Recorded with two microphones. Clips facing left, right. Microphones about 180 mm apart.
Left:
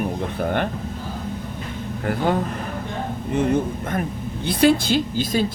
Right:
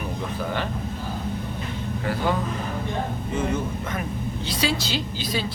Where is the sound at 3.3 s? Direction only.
55° left (ahead or behind).